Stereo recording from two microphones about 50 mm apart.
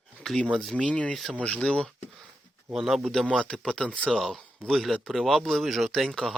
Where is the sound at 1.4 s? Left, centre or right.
Left.